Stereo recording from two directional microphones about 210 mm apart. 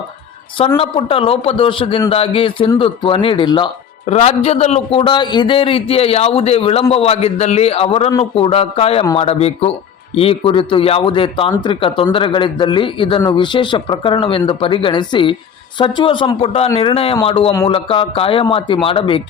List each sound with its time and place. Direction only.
0.8 s speech: 25° left (ahead or behind)
17.7 s speech: 25° left (ahead or behind)